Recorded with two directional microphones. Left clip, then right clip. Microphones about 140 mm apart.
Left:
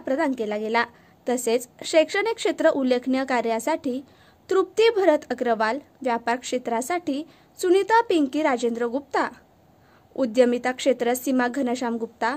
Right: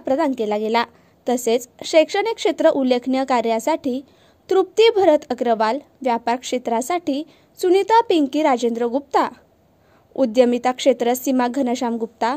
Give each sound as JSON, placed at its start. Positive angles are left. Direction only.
{"t": 0.0, "sound": "a woman's voice", "side_deg": -25}